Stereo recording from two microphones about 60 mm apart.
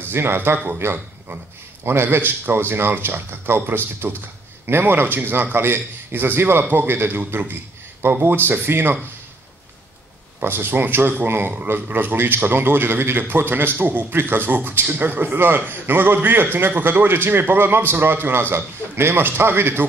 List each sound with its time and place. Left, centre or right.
0.1 s a man's voice: right
10.4 s a man's voice: right